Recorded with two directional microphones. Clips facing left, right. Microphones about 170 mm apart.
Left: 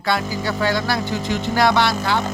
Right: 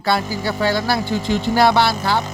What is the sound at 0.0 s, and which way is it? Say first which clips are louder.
A man's voice: right 2 dB; 30° right (ahead or behind).